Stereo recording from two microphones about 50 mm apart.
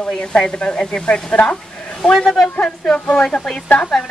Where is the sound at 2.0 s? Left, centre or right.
Centre.